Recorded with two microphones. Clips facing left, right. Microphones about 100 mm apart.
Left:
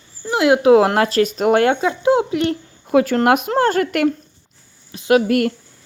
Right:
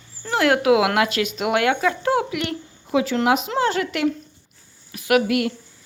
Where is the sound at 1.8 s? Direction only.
25° left (ahead or behind).